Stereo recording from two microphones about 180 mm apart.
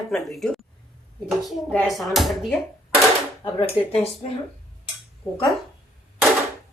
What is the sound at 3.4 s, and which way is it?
Speech, 30° left (ahead or behind).